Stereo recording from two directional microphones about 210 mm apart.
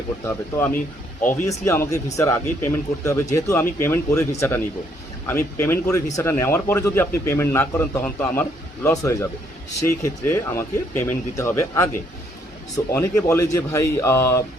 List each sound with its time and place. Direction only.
0.3 s speech: 10° left (ahead or behind)